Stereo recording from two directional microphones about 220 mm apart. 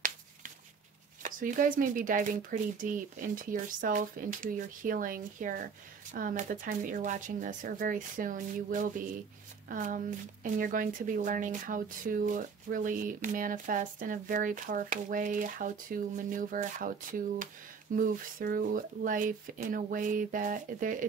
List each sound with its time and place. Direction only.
1.2 s speech: 35° right (ahead or behind)
17.9 s speech: 40° right (ahead or behind)